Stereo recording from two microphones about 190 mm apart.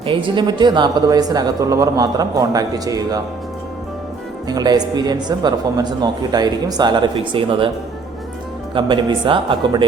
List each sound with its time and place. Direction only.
0.0 s speech: 25° right (ahead or behind)
4.4 s speech: 20° right (ahead or behind)
8.7 s speech: 25° right (ahead or behind)